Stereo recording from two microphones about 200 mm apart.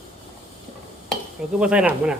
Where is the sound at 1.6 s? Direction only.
5° right (ahead or behind).